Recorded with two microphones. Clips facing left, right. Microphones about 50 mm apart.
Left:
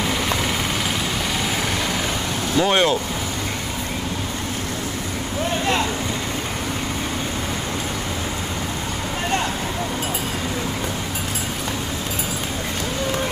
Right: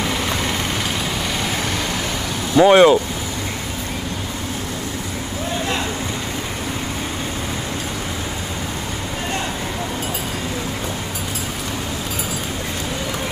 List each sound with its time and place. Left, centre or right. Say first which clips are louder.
2.5 s speech: right 8 dB; right